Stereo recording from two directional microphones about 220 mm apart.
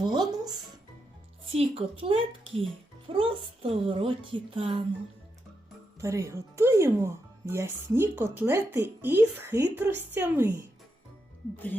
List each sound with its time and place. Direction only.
0.0 s a child's voice: 20° right (ahead or behind)
6.0 s speech: 15° right (ahead or behind)